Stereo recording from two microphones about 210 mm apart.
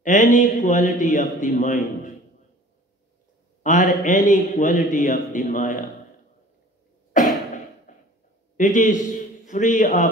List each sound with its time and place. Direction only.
0.0 s a man's voice: 35° left (ahead or behind)
3.6 s a man's voice: 35° left (ahead or behind)
7.1 s cough: 40° left (ahead or behind)
7.9 s a sound: 35° left (ahead or behind)
8.5 s a man's voice: 35° left (ahead or behind)